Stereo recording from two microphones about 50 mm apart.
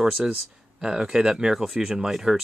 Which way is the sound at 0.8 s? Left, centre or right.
Centre.